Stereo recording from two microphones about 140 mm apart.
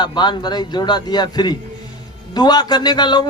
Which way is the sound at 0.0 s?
30° left (ahead or behind).